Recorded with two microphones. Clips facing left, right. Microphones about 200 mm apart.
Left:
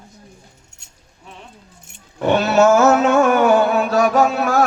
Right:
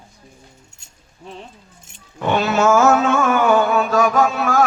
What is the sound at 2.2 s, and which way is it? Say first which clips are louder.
A man's voice: left 3 dB; 40° left (ahead or behind).